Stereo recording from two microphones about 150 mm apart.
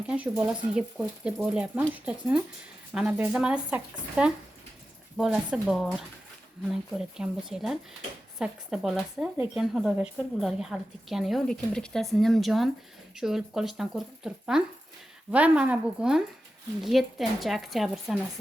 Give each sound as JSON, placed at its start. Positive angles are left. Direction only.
{"t": 0.1, "sound": "a woman's voice", "side_deg": -5}